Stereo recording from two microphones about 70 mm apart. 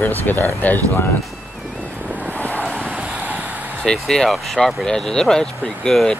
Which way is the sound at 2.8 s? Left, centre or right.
Right.